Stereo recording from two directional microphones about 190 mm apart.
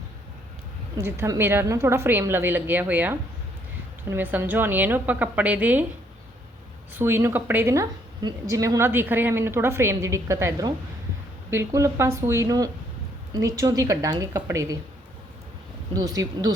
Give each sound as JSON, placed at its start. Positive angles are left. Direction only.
{"t": 0.9, "sound": "a woman's voice", "side_deg": -15}
{"t": 6.9, "sound": "a woman's voice", "side_deg": -10}
{"t": 15.9, "sound": "speech", "side_deg": -20}